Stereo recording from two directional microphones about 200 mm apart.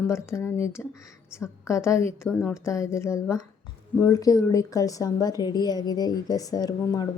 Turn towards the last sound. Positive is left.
turn(degrees=20)  # may be behind; listen again after turning